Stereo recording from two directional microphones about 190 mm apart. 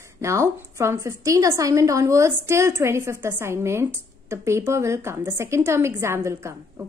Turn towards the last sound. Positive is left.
turn(degrees=-15)  # may be behind; listen again after turning